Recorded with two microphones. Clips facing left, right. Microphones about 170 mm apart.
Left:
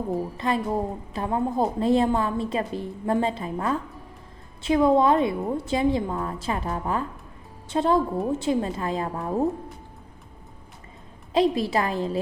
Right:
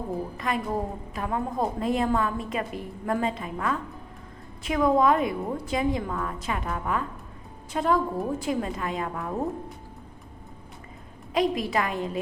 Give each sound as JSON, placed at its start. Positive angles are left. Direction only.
{"t": 0.3, "sound": "a woman's voice", "side_deg": 30}
{"t": 11.3, "sound": "a woman's voice", "side_deg": 30}